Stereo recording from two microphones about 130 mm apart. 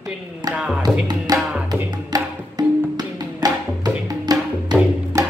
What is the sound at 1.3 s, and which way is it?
Music, 30° right (ahead or behind).